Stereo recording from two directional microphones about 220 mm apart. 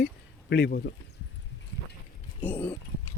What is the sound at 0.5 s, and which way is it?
Speech, 50° left (ahead or behind).